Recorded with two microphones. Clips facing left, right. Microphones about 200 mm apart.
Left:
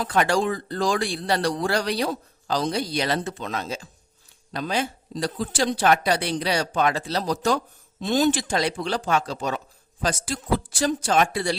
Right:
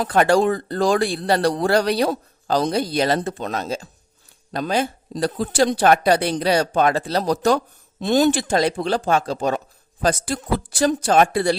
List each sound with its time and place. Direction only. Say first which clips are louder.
0.3 s speech: right 6 dB; 60° right (ahead or behind)